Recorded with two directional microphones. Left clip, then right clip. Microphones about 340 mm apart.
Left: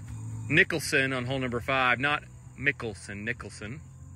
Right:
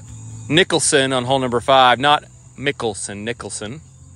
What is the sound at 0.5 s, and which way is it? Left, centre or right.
Speech, centre.